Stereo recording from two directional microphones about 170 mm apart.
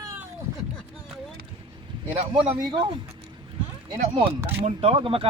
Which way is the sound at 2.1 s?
35° right (ahead or behind).